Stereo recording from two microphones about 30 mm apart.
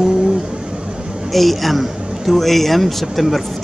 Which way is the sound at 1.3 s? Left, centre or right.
Centre.